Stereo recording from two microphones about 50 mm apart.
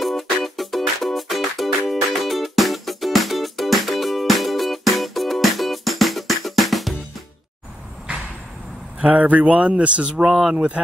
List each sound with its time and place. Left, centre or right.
0.0 s music: centre
9.0 s speech: right
10.2 s speech: centre